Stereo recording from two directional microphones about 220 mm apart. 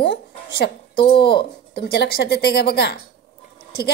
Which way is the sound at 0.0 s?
50° left (ahead or behind).